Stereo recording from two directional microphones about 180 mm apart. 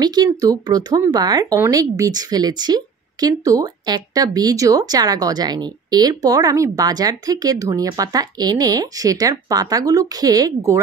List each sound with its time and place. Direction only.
0.0 s speech: 20° right (ahead or behind)